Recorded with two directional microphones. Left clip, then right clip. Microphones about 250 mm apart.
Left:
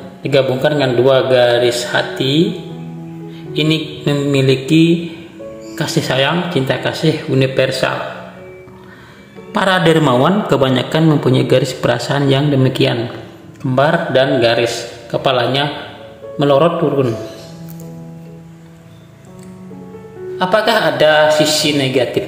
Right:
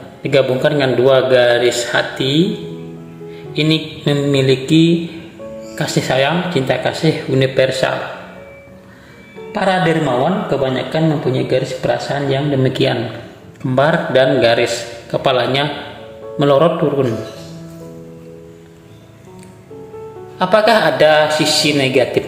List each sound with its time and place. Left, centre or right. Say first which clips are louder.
0.2 s a man's voice: even; centre
3.5 s a man's voice: even; centre
9.5 s a man's voice: left 2 dB; centre
20.3 s a man's voice: right 2 dB; centre